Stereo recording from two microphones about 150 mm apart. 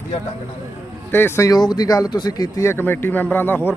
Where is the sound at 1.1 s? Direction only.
15° left (ahead or behind).